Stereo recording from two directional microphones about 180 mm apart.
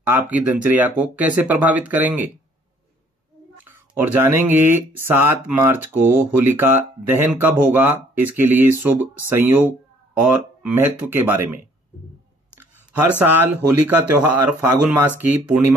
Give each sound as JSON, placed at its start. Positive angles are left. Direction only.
{"t": 0.0, "sound": "speech", "side_deg": -10}
{"t": 3.6, "sound": "speech", "side_deg": -10}
{"t": 13.2, "sound": "speech", "side_deg": -10}